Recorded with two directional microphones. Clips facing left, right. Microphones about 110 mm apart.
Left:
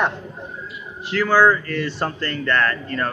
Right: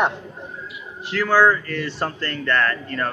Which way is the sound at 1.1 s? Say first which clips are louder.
Left 1 dB; centre (ahead or behind).